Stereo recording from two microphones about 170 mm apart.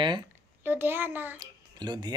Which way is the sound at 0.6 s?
10° right (ahead or behind).